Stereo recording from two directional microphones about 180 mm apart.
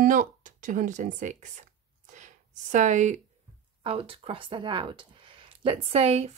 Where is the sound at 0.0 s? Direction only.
45° right (ahead or behind).